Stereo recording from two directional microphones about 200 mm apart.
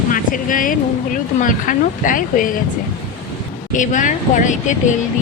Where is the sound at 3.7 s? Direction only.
40° left (ahead or behind).